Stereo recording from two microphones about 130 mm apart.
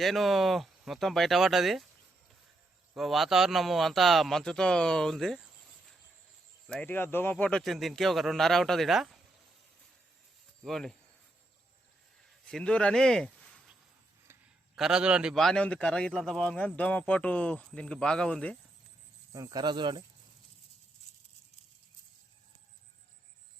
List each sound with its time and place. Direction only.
0.0 s a man's voice: centre (ahead or behind)
2.9 s a man's voice: centre (ahead or behind)
6.7 s a man's voice: 5° left (ahead or behind)
6.9 s a man's voice: 15° left (ahead or behind); by 9.2 s centre (ahead or behind)
10.6 s a man's voice: 5° left (ahead or behind)
12.5 s speech: 5° left (ahead or behind)
14.8 s a man's voice: 5° right (ahead or behind)
19.3 s speech: 30° right (ahead or behind)